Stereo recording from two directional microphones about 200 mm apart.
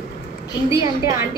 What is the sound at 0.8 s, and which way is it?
Speech, 15° right (ahead or behind).